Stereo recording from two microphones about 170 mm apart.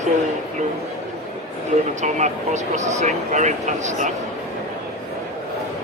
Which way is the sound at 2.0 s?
45° right (ahead or behind).